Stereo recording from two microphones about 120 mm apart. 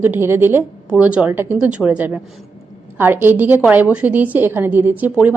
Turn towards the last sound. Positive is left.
turn(degrees=-15)  # may be behind; listen again after turning